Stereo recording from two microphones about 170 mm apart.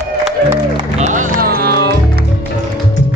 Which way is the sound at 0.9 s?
45° right (ahead or behind).